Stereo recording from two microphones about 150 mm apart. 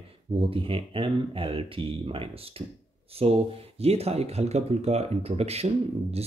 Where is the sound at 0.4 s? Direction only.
35° right (ahead or behind).